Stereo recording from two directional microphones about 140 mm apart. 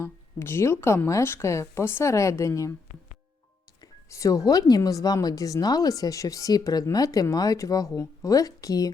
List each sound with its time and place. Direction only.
0.0 s speech: 15° left (ahead or behind)
3.8 s speech: 25° left (ahead or behind)